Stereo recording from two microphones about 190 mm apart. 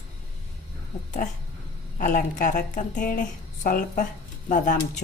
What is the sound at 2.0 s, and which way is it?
Speech, 40° left (ahead or behind).